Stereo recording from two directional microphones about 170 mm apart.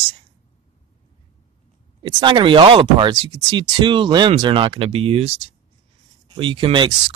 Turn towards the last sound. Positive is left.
turn(degrees=-30)  # may be behind; listen again after turning